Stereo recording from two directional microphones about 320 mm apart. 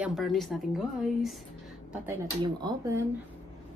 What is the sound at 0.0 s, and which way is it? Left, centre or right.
A woman's voice, centre.